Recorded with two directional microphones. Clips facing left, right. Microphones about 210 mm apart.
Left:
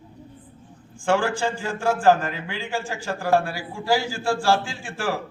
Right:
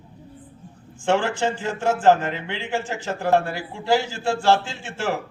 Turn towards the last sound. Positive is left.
turn(degrees=-20)  # may be behind; listen again after turning